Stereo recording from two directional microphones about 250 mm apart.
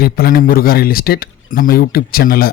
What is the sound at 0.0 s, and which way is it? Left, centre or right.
Speech, left.